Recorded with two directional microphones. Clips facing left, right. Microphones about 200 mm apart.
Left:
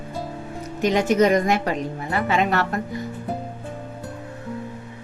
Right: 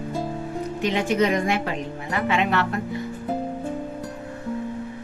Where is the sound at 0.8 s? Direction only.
45° left (ahead or behind).